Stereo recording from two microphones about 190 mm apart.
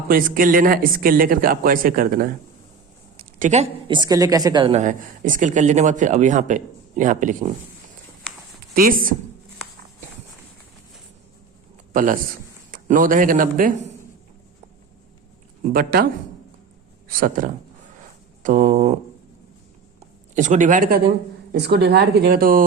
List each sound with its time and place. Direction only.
0.1 s speech: 45° right (ahead or behind)
3.3 s a woman's voice: 40° right (ahead or behind)
3.8 s a woman's voice: 25° right (ahead or behind); by 7.5 s 40° right (ahead or behind)
8.7 s speech: 50° right (ahead or behind)
12.7 s speech: 45° right (ahead or behind)
15.7 s speech: 50° right (ahead or behind)
17.1 s a woman's voice: 45° right (ahead or behind)
20.3 s speech: 40° right (ahead or behind)